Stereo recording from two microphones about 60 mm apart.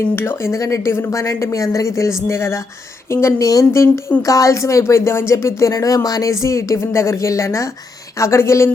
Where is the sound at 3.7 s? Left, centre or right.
Left.